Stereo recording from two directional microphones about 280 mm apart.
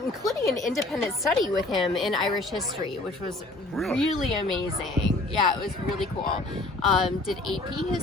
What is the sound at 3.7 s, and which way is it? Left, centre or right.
Speech, centre.